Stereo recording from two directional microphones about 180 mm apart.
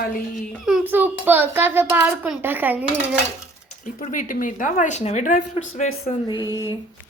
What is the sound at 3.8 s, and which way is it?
Speech, 45° left (ahead or behind).